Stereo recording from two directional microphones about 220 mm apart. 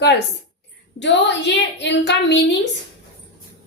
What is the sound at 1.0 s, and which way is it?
A woman's voice, 55° left (ahead or behind).